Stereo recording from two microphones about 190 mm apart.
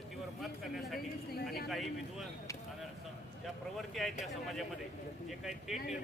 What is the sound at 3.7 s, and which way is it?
Speech, centre (ahead or behind).